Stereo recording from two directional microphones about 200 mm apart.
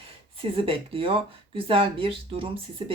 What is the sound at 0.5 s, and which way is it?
Speech, 25° right (ahead or behind).